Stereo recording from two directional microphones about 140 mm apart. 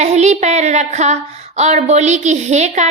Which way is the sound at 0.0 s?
55° right (ahead or behind).